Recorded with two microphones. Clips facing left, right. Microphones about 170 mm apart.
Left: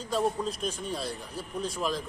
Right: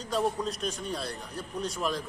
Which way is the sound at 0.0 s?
5° left (ahead or behind).